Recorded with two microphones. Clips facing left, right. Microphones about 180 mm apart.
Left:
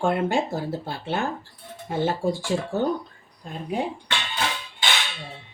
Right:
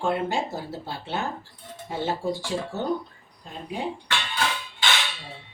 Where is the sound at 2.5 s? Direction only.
55° left (ahead or behind).